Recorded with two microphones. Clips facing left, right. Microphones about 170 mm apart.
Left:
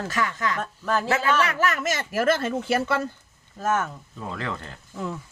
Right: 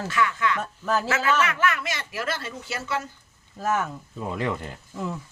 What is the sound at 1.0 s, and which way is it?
Speech, 35° left (ahead or behind).